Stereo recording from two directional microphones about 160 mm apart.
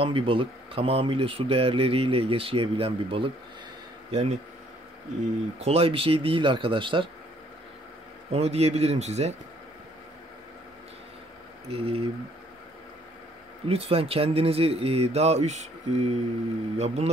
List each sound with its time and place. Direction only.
0.0 s speech: 35° right (ahead or behind)
5.6 s speech: 40° right (ahead or behind)
8.3 s speech: 40° right (ahead or behind)
11.7 s speech: 35° right (ahead or behind)
13.7 s speech: 40° right (ahead or behind)